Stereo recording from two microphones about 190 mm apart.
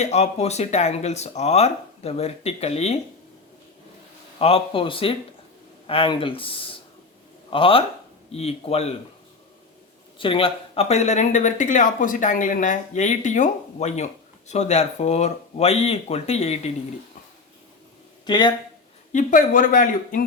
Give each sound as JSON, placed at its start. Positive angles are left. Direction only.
{"t": 0.0, "sound": "speech", "side_deg": 35}
{"t": 4.4, "sound": "speech", "side_deg": 30}
{"t": 10.2, "sound": "speech", "side_deg": 30}
{"t": 18.3, "sound": "speech", "side_deg": 25}
{"t": 19.1, "sound": "speech", "side_deg": 45}